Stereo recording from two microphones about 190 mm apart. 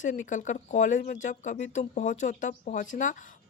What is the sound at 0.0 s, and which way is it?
Speech, 40° left (ahead or behind).